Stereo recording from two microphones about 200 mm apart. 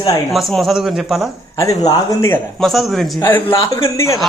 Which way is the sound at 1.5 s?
15° left (ahead or behind).